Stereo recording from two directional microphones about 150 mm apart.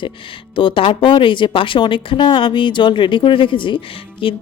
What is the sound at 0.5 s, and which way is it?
Speech, 35° left (ahead or behind).